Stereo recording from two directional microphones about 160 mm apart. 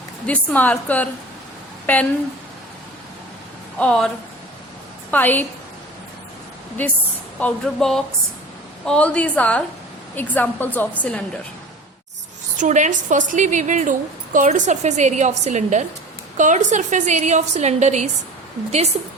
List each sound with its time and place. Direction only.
0.3 s a woman's voice: 10° left (ahead or behind)
3.8 s a woman's voice: 5° left (ahead or behind)
5.1 s a woman's voice: 10° left (ahead or behind)
6.8 s a woman's voice: 10° left (ahead or behind)
12.5 s a woman's voice: 50° right (ahead or behind)